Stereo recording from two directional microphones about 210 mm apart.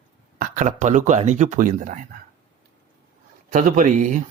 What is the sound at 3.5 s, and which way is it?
Speech, 40° right (ahead or behind).